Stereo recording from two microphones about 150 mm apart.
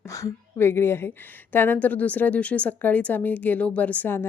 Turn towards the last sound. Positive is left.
turn(degrees=15)  # may be behind; listen again after turning